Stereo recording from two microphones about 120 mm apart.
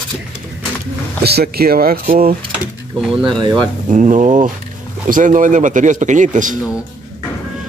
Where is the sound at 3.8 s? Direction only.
90° right.